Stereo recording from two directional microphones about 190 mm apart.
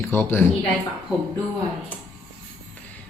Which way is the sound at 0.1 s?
10° left (ahead or behind).